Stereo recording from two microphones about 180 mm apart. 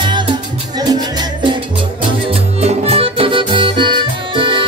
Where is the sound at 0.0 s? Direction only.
25° right (ahead or behind).